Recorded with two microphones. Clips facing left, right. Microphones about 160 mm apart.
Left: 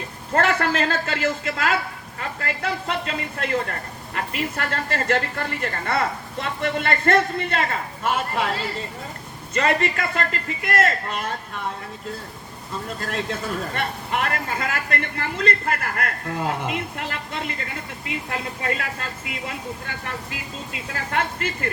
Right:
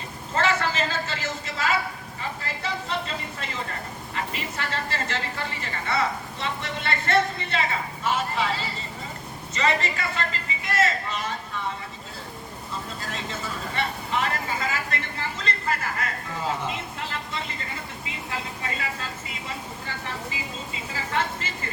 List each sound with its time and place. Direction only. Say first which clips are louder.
0.3 s a woman's voice: left 4 dB; 55° left (ahead or behind)
13.0 s a woman's voice: left 6 dB; 55° left (ahead or behind)